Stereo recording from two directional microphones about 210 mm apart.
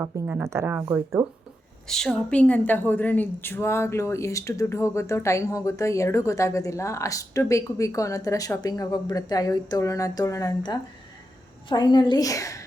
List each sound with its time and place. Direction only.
0.0 s speech: 10° right (ahead or behind)
1.9 s a woman's voice: centre (ahead or behind)